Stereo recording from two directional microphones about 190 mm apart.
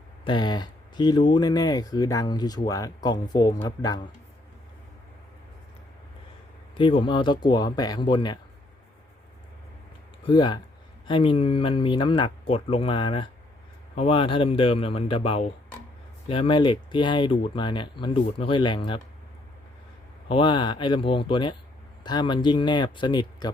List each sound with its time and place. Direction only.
0.3 s speech: 25° left (ahead or behind)
6.7 s speech: 25° left (ahead or behind)
10.2 s speech: 25° left (ahead or behind)
20.2 s speech: 25° left (ahead or behind)